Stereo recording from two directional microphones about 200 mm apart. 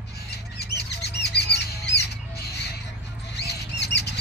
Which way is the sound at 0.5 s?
55° left (ahead or behind).